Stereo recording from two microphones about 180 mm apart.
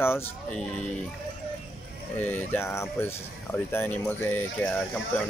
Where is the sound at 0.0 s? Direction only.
15° left (ahead or behind).